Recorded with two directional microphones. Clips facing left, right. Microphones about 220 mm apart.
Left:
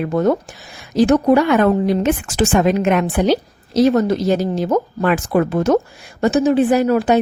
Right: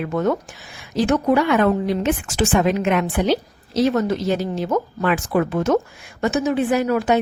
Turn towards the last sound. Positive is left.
turn(degrees=35)  # may be behind; listen again after turning